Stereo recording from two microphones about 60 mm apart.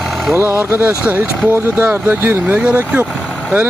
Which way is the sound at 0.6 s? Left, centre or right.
Right.